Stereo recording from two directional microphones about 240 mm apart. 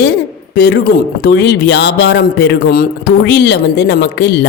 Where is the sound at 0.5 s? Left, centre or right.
Left.